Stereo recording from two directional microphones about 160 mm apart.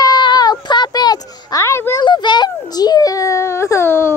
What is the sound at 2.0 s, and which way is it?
Baby cry, 30° left (ahead or behind).